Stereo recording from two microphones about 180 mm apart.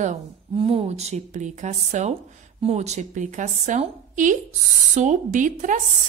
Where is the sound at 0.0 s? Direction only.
35° right (ahead or behind).